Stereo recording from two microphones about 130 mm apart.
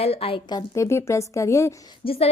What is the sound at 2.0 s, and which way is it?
Speech, 45° left (ahead or behind).